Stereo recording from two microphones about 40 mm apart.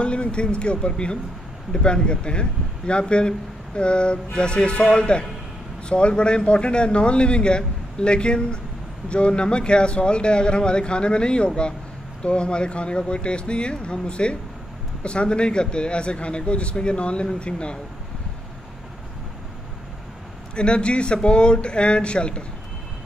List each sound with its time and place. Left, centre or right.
0.0 s a man's voice: left
20.5 s a man's voice: left